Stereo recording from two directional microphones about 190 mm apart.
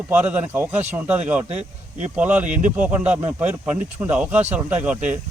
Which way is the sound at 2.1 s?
10° right (ahead or behind).